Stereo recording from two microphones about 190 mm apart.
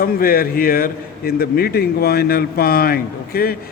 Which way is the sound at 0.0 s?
50° left (ahead or behind).